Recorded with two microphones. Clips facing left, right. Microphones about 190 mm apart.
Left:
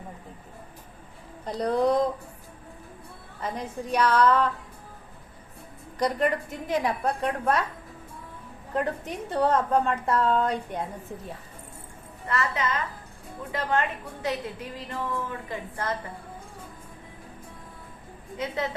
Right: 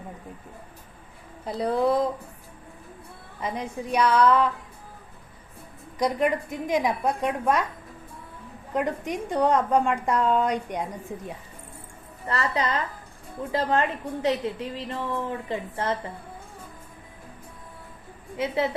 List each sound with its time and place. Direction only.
1.5 s speech: 5° right (ahead or behind)
3.4 s a woman's voice: 10° right (ahead or behind)
6.0 s a woman's voice: 10° right (ahead or behind)
8.7 s a woman's voice: 15° right (ahead or behind)
12.3 s a woman's voice: 35° right (ahead or behind)
18.3 s a woman's voice: 20° right (ahead or behind)